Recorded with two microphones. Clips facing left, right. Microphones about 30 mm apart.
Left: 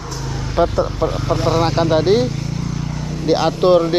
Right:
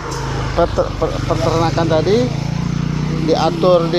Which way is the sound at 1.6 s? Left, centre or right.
Centre.